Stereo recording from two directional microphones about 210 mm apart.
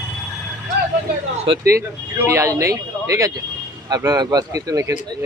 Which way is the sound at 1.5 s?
25° right (ahead or behind).